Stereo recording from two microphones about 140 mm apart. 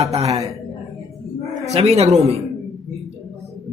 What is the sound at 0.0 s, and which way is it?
Speech, 50° right (ahead or behind).